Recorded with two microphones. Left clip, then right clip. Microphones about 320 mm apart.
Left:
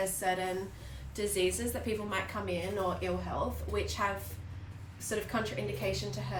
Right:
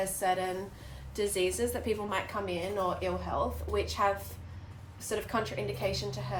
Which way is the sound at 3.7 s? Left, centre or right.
Centre.